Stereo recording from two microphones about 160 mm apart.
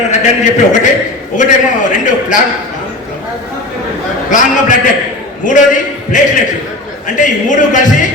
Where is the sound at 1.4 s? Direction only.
50° left (ahead or behind).